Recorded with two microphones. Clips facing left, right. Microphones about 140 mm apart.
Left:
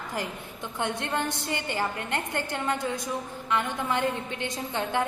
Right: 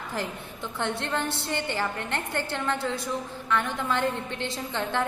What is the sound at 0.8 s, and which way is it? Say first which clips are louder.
A woman's voice: even; 15° left (ahead or behind).